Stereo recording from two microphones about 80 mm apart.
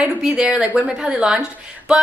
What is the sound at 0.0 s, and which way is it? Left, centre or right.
A woman's voice, centre.